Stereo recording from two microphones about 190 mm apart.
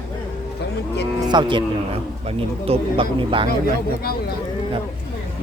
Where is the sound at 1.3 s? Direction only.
25° right (ahead or behind).